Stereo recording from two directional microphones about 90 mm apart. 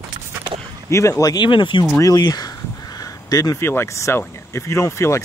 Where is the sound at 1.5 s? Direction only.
60° left (ahead or behind).